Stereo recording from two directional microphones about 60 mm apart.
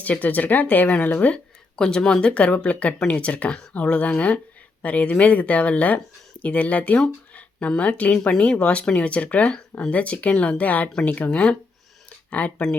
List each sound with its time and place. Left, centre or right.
0.0 s speech: left
1.7 s speech: centre